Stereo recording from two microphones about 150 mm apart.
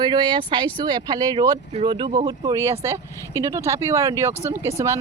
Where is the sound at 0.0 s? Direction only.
30° right (ahead or behind).